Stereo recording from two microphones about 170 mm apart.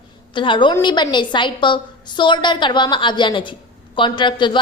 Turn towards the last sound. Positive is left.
turn(degrees=25)  # may be behind; listen again after turning